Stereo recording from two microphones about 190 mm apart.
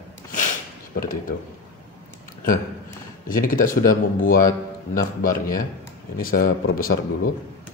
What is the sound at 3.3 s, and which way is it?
A man's voice, 45° left (ahead or behind).